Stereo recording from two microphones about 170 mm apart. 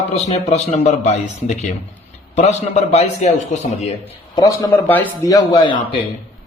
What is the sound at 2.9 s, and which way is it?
Speech, 40° left (ahead or behind).